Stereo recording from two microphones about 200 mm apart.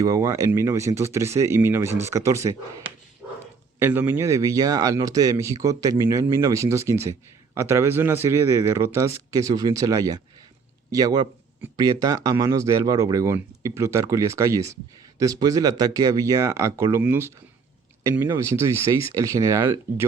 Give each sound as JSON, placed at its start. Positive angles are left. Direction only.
{"t": 0.0, "sound": "speech", "side_deg": -15}
{"t": 3.2, "sound": "bow-wow", "side_deg": -5}
{"t": 3.8, "sound": "speech", "side_deg": -10}